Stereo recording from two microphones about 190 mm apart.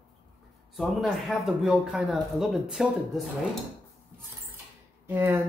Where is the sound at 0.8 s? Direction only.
Centre (ahead or behind).